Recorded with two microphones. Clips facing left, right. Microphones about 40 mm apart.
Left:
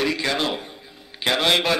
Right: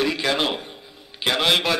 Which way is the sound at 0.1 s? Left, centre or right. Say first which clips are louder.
Right 1 dB; centre.